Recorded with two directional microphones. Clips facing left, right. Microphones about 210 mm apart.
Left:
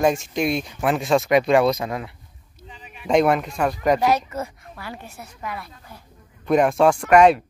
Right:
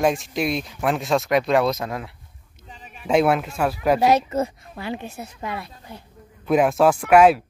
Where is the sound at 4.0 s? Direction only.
25° right (ahead or behind).